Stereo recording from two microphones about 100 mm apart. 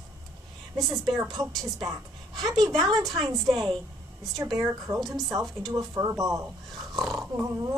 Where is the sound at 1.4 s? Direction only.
35° right (ahead or behind).